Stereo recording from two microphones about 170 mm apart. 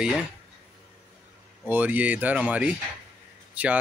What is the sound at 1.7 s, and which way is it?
Speech, 10° right (ahead or behind).